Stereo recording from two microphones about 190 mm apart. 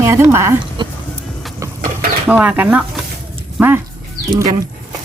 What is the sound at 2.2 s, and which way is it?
Speech, 10° right (ahead or behind).